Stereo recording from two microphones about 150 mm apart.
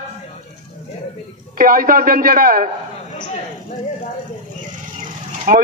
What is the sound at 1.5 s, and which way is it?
A man's voice, 70° right (ahead or behind).